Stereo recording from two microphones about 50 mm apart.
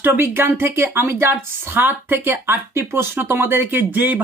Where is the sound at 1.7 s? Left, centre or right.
Right.